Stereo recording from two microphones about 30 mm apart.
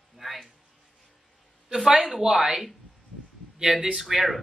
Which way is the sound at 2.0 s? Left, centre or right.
Centre.